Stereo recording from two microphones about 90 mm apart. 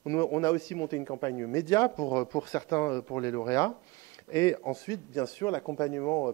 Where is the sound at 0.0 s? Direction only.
35° left (ahead or behind).